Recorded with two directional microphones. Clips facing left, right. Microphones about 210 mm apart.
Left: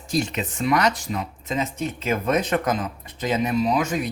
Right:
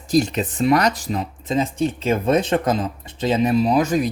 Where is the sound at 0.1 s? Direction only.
35° right (ahead or behind).